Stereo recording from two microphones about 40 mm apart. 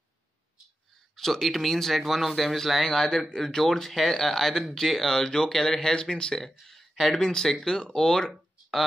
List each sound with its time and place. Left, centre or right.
1.1 s speech: centre
2.9 s speech: centre
6.4 s speech: centre